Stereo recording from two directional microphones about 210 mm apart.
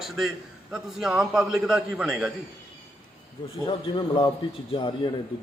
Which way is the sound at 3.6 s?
20° left (ahead or behind).